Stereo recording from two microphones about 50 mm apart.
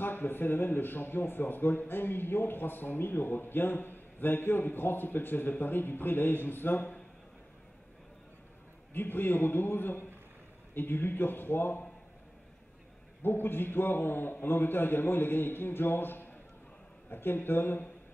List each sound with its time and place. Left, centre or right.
0.0 s speech: left
8.9 s speech: left
13.2 s speech: left